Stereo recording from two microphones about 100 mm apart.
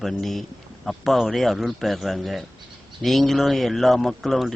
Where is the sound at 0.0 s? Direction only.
Centre (ahead or behind).